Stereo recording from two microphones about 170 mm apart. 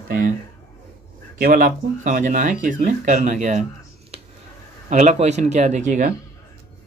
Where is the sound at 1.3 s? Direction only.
55° right (ahead or behind).